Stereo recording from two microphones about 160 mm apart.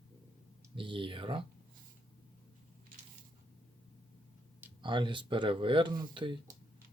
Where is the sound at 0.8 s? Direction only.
30° right (ahead or behind).